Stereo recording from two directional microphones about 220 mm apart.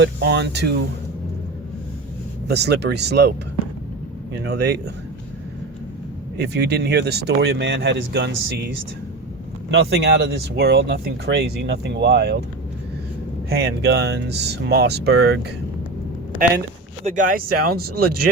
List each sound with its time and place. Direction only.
0.0 s speech: 50° right (ahead or behind)
2.5 s speech: 50° right (ahead or behind)
4.4 s speech: 50° right (ahead or behind)
6.3 s speech: 50° right (ahead or behind)
13.5 s speech: 45° right (ahead or behind)
17.1 s speech: 35° right (ahead or behind)